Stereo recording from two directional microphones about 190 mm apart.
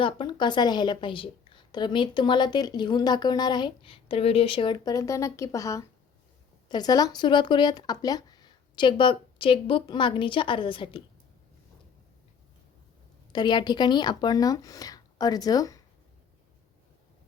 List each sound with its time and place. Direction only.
0.0 s a woman's voice: 25° left (ahead or behind)
13.3 s a woman's voice: 25° left (ahead or behind)